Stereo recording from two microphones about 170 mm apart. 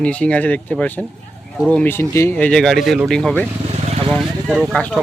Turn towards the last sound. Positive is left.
turn(degrees=5)  # may be behind; listen again after turning